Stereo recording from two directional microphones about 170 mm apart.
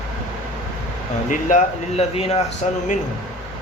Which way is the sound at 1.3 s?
50° left (ahead or behind).